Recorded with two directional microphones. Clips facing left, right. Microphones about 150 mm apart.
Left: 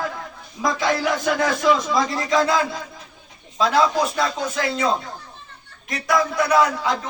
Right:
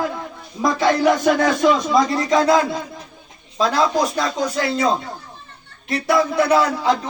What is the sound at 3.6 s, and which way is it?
Speech, 40° right (ahead or behind).